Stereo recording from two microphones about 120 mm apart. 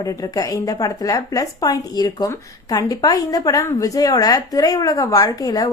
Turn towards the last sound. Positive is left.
turn(degrees=30)  # may be behind; listen again after turning